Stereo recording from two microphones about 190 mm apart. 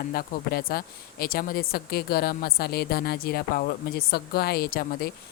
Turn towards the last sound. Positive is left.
turn(degrees=50)  # may be behind; listen again after turning